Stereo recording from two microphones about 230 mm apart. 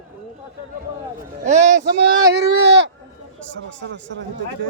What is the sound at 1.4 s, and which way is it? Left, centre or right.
Speech, right.